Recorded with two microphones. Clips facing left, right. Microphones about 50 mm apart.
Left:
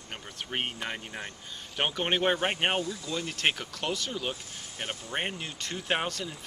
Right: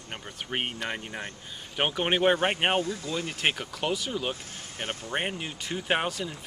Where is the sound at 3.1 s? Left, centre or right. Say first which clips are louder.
Left 2 dB; centre.